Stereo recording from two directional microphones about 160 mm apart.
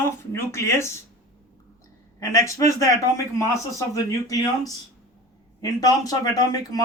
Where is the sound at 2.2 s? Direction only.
20° left (ahead or behind).